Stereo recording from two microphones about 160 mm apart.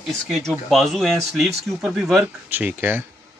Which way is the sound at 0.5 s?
Centre (ahead or behind).